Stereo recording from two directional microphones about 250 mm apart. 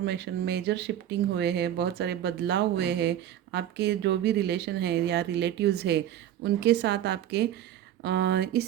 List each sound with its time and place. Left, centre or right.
0.0 s speech: right